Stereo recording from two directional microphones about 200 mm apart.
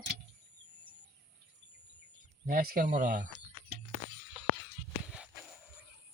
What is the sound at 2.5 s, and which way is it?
Speech, 50° right (ahead or behind).